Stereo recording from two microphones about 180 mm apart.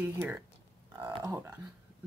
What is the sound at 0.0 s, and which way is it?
Speech, 15° right (ahead or behind).